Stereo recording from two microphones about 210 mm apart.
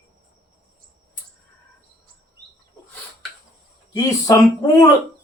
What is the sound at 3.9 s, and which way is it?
Speech, 20° left (ahead or behind).